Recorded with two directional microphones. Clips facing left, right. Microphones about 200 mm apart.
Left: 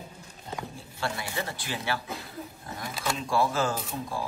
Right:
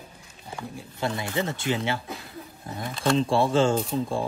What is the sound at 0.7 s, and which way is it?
Speech, 20° right (ahead or behind).